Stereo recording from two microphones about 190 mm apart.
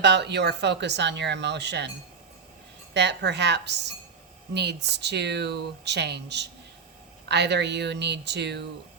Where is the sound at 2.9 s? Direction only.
65° right (ahead or behind).